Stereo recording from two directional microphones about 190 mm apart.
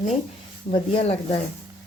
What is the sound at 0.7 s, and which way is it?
Speech, 35° left (ahead or behind).